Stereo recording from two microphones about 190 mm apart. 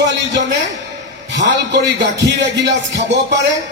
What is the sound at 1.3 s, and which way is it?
Music, 70° right (ahead or behind).